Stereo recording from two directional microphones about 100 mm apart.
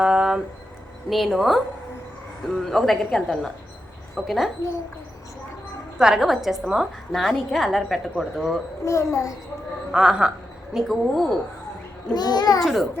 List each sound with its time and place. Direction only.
0.0 s a sound: 5° right (ahead or behind)
1.1 s a woman's voice: centre (ahead or behind)
6.0 s a woman's voice: 5° right (ahead or behind)
8.8 s a child's voice: 30° left (ahead or behind)
9.9 s a woman's voice: 5° right (ahead or behind)
12.1 s a child's voice: 45° left (ahead or behind)
12.6 s a woman's voice: centre (ahead or behind)